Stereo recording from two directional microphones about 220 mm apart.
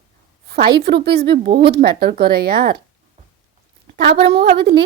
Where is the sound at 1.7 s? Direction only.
45° right (ahead or behind).